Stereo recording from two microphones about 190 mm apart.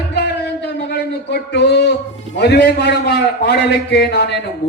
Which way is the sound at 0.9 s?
60° left (ahead or behind).